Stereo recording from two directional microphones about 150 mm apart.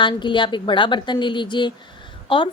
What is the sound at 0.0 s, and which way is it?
A woman's voice, 30° left (ahead or behind).